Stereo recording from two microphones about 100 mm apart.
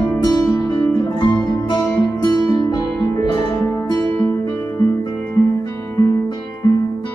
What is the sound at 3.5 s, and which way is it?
Music, 35° left (ahead or behind).